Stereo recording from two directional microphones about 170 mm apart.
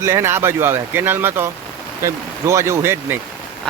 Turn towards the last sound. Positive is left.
turn(degrees=-15)  # may be behind; listen again after turning